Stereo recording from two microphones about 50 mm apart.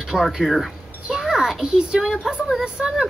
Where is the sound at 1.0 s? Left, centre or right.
Centre.